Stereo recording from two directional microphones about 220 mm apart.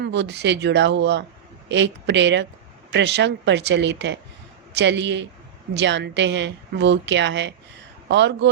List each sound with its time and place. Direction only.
0.0 s a woman's voice: 50° right (ahead or behind)